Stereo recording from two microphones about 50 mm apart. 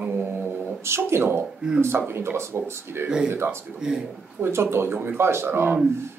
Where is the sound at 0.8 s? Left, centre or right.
Right.